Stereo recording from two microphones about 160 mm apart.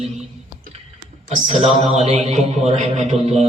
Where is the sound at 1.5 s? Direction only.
40° right (ahead or behind).